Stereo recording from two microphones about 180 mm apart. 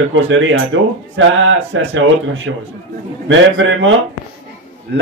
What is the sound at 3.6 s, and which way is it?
Speech, 90° right.